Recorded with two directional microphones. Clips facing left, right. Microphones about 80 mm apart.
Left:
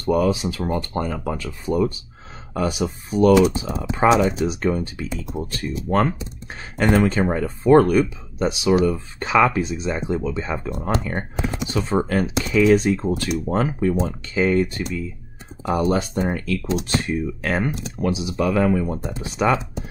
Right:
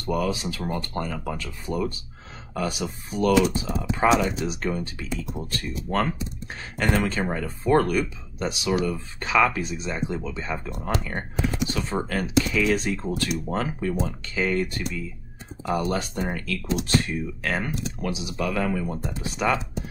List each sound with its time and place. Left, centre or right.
0.0 s speech: left